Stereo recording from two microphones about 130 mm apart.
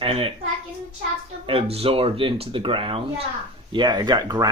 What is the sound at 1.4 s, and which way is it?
Speech, 45° right (ahead or behind).